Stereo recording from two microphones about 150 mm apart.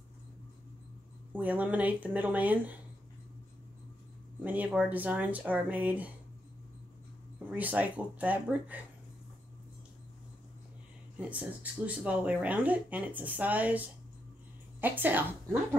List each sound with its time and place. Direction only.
1.3 s speech: 10° right (ahead or behind)
4.4 s speech: 10° right (ahead or behind)
7.3 s speech: 10° right (ahead or behind)
11.1 s speech: 10° right (ahead or behind)